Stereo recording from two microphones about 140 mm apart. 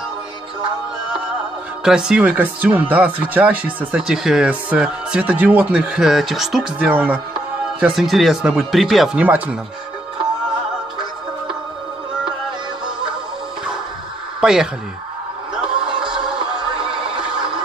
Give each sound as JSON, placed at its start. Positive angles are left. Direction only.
{"t": 1.9, "sound": "speech", "side_deg": -5}
{"t": 14.4, "sound": "speech", "side_deg": -5}
{"t": 16.3, "sound": "music", "side_deg": -35}